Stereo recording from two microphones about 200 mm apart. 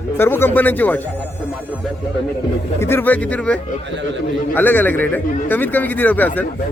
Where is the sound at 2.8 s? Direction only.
10° left (ahead or behind).